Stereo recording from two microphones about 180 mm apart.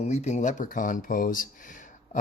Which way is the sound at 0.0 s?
40° left (ahead or behind).